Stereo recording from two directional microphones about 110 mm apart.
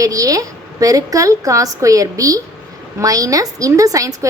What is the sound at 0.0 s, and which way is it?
A woman's voice, 30° right (ahead or behind).